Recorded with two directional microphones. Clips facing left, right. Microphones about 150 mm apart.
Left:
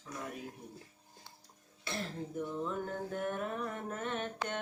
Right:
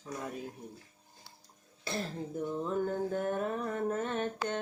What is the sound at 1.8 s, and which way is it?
Cough, 35° right (ahead or behind).